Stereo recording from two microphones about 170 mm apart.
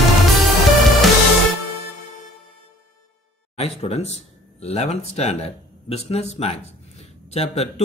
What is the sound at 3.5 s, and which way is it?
Speech, 35° left (ahead or behind).